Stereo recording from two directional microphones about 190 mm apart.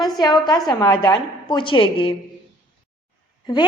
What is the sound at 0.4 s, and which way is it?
A woman's voice, 20° left (ahead or behind).